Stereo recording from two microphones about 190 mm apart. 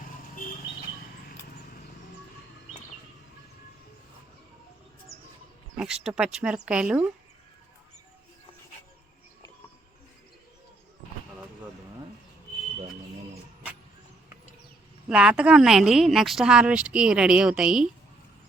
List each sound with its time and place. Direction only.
5.8 s a woman's voice: 5° right (ahead or behind)
15.1 s a woman's voice: 5° right (ahead or behind)